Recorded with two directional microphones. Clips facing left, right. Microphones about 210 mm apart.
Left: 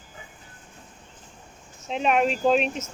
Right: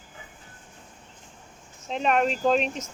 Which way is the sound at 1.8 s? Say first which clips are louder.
Left 1 dB; 5° left (ahead or behind).